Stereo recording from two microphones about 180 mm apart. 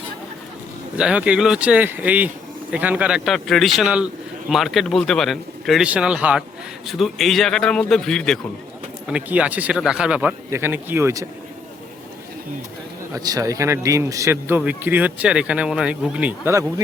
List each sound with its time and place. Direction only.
0.9 s a man's voice: 5° right (ahead or behind)
13.1 s a man's voice: 20° right (ahead or behind)